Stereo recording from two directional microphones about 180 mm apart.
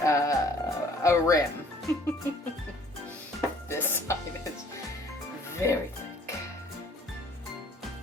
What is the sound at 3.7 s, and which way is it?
Music, 10° left (ahead or behind).